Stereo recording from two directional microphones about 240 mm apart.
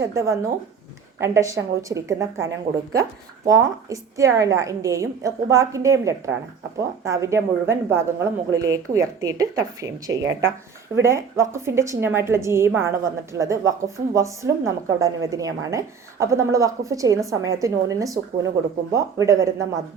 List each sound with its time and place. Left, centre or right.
0.0 s a woman's voice: centre